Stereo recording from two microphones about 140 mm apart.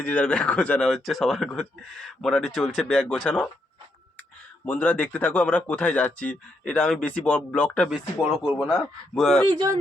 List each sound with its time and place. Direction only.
0.0 s speech: 10° left (ahead or behind)
4.6 s speech: 10° left (ahead or behind)
7.9 s speech: 5° right (ahead or behind)
9.5 s speech: 30° right (ahead or behind)